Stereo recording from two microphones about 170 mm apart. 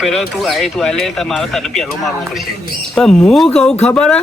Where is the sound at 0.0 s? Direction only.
Centre (ahead or behind).